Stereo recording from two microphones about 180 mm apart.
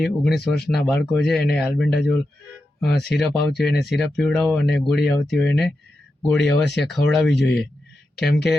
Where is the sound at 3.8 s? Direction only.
Centre (ahead or behind).